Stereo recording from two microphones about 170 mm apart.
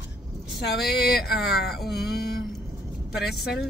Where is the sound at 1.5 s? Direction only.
65° left (ahead or behind).